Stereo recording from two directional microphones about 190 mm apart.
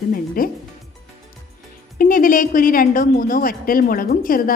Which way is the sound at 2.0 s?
45° left (ahead or behind).